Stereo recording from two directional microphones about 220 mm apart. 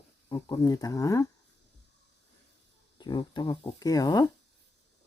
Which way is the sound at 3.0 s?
20° left (ahead or behind).